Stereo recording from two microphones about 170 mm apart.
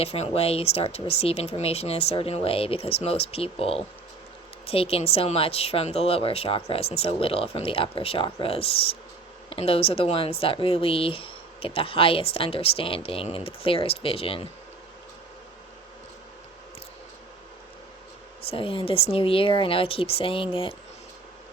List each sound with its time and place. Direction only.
0.0 s speech: 35° left (ahead or behind)
18.5 s speech: 30° left (ahead or behind)